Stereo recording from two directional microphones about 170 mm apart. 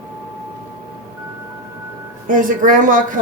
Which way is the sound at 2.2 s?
50° right (ahead or behind).